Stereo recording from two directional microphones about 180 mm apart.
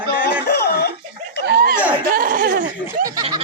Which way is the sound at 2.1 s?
50° right (ahead or behind).